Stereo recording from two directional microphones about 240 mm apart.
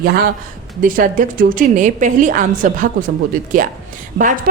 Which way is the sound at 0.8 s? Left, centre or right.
Right.